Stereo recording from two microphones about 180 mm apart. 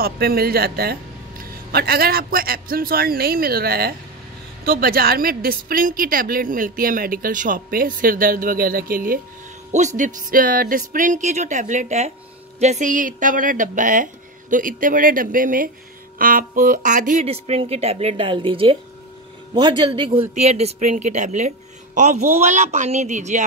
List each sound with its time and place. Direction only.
0.0 s a man's voice: 60° right (ahead or behind)
9.7 s a woman's voice: 40° right (ahead or behind)